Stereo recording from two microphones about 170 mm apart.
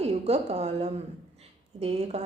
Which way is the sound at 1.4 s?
40° right (ahead or behind).